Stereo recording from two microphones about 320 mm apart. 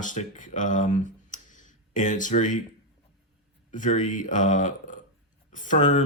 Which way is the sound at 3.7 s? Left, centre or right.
Left.